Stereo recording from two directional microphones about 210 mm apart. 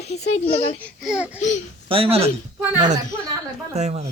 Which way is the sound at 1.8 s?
25° right (ahead or behind).